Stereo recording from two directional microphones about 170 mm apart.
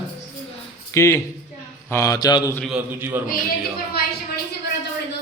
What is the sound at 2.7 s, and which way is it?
Speech, 15° right (ahead or behind).